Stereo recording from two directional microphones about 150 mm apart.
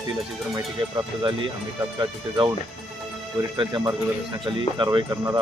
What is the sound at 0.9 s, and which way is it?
Speech, 30° right (ahead or behind).